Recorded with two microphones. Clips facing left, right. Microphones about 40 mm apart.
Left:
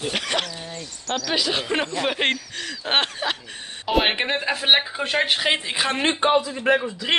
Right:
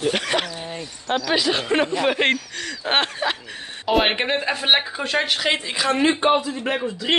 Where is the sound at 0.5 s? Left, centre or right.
Right.